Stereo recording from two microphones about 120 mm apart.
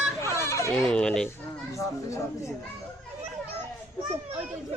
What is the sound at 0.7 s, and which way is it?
Speech, centre (ahead or behind).